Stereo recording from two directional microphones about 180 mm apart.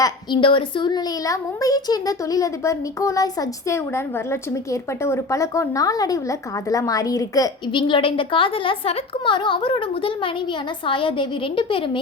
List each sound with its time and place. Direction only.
0.0 s a woman's voice: 25° left (ahead or behind)